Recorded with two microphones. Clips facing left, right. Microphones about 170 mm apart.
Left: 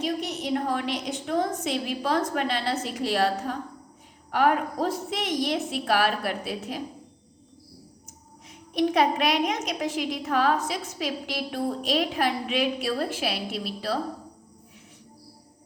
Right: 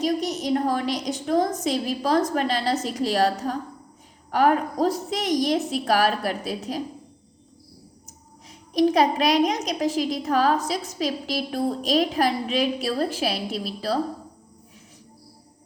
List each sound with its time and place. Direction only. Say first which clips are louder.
0.0 s a child's voice: right 5 dB; 40° right (ahead or behind)
8.0 s a child's voice: right 1 dB; 35° right (ahead or behind)